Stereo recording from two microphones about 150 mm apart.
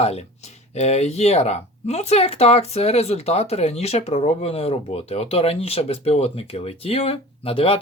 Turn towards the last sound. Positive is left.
turn(degrees=40)  # may be behind; listen again after turning